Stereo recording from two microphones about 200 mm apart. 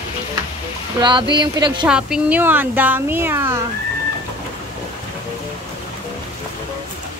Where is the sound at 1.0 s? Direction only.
20° right (ahead or behind).